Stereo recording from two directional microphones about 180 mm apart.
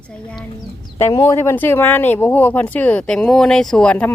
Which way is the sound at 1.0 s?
20° left (ahead or behind).